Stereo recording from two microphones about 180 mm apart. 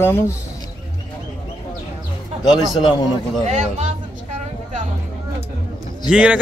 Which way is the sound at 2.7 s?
25° left (ahead or behind).